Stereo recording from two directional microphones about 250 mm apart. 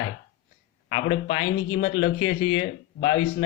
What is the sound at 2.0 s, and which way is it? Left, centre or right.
Speech, left.